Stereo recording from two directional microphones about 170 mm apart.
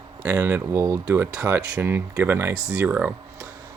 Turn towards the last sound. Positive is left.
turn(degrees=-5)  # may be behind; listen again after turning